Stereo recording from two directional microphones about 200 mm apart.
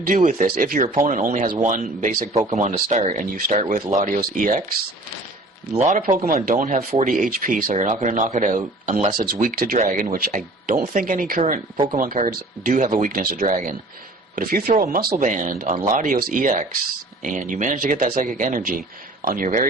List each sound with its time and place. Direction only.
0.1 s speech: 40° right (ahead or behind)
6.0 s speech: 35° right (ahead or behind)